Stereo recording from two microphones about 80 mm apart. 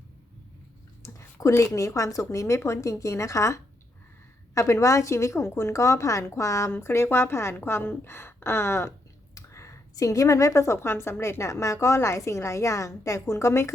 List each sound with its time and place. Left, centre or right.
1.0 s a woman's voice: left
9.3 s a sound: left
9.9 s a woman's voice: left